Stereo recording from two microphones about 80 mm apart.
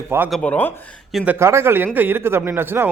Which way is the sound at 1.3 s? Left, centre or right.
Right.